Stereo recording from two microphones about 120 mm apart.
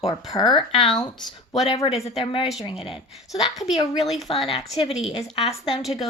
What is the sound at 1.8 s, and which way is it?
Speech, 50° left (ahead or behind).